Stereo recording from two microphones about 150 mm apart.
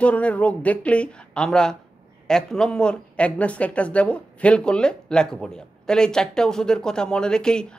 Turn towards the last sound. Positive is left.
turn(degrees=5)  # may be behind; listen again after turning